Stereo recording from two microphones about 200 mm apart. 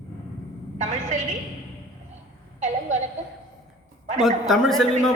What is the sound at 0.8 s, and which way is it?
Speech, 35° right (ahead or behind).